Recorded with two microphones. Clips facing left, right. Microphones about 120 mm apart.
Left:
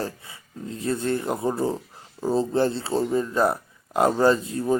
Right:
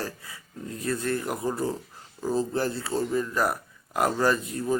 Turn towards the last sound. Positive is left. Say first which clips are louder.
# left 4 dB
turn(degrees=25)  # may be behind; listen again after turning